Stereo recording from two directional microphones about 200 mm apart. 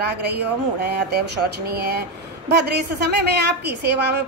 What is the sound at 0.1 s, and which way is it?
A woman's voice, 55° right (ahead or behind).